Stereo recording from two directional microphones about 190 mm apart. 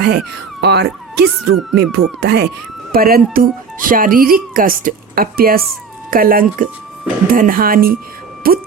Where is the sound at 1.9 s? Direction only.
60° right (ahead or behind).